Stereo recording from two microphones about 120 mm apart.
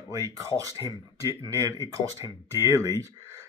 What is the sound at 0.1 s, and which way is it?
Speech, 30° right (ahead or behind).